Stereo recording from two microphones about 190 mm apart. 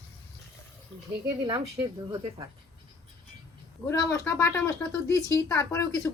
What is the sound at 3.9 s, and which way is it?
Speech, 15° left (ahead or behind).